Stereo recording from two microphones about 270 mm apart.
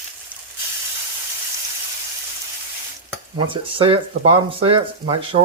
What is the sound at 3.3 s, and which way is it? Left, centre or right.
Speech, centre.